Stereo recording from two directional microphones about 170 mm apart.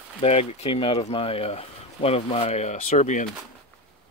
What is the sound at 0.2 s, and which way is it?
Speech, 35° left (ahead or behind).